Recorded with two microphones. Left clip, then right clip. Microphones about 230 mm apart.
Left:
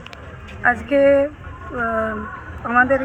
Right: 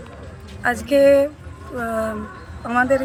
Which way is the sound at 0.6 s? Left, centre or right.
Centre.